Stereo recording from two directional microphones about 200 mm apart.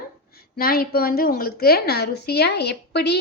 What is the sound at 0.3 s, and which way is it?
A woman's voice, 50° left (ahead or behind).